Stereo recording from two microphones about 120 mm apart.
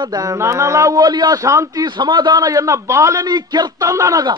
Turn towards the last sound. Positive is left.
turn(degrees=-30)  # may be behind; listen again after turning